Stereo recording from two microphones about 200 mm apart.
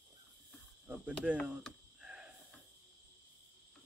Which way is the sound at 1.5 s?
5° right (ahead or behind).